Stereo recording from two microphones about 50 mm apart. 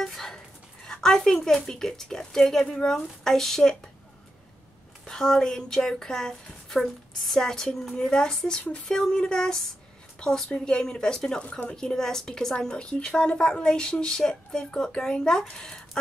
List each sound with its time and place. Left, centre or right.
0.0 s dog: centre
0.8 s a woman's voice: centre
5.0 s a woman's voice: centre